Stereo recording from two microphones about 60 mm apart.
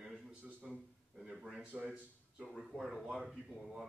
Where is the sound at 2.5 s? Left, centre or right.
Centre.